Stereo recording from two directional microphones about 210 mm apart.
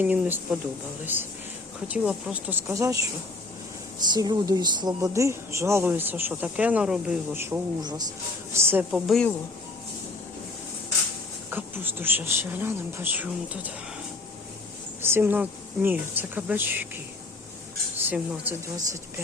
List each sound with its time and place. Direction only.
0.0 s speech: 10° right (ahead or behind)
7.8 s speech: 20° right (ahead or behind); by 9.3 s centre (ahead or behind)
11.5 s speech: 10° right (ahead or behind)
15.0 s speech: 10° right (ahead or behind)
17.9 s speech: 10° right (ahead or behind)